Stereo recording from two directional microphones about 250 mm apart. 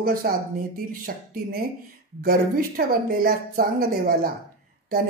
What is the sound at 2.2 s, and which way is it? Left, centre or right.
Speech, right.